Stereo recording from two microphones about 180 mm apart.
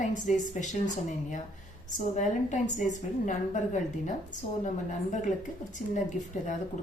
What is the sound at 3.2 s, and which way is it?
A woman's voice, 45° left (ahead or behind).